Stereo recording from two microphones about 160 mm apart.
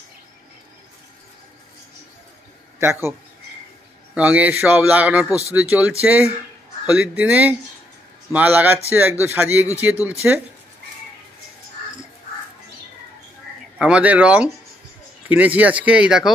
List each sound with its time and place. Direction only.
2.8 s speech: 15° right (ahead or behind)
13.7 s speech: 5° right (ahead or behind)